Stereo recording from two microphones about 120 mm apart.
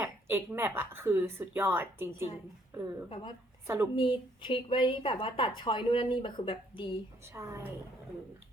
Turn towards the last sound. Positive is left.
turn(degrees=-25)  # may be behind; listen again after turning